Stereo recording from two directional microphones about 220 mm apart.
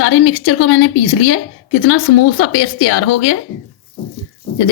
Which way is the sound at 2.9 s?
70° left (ahead or behind).